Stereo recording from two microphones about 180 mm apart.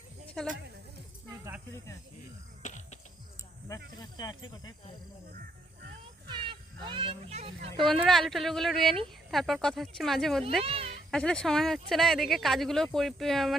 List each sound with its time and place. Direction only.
0.4 s speech: 50° right (ahead or behind)
2.6 s music: 40° left (ahead or behind)
3.9 s speech: 25° left (ahead or behind)
5.3 s music: 50° right (ahead or behind)
6.2 s speech: 25° right (ahead or behind)
7.8 s speech: centre (ahead or behind)
10.6 s speech: 30° right (ahead or behind)
11.1 s speech: 5° left (ahead or behind)